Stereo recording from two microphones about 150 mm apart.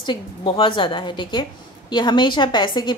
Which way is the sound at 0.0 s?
30° left (ahead or behind).